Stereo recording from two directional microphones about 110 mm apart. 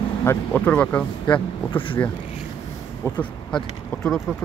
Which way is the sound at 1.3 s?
45° left (ahead or behind).